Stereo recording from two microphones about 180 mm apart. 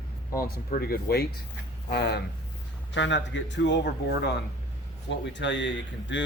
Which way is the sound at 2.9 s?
85° left.